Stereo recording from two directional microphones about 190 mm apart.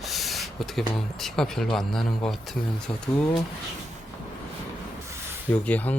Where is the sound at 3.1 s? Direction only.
15° left (ahead or behind).